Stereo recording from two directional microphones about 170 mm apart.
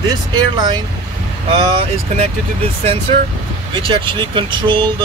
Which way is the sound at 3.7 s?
30° right (ahead or behind).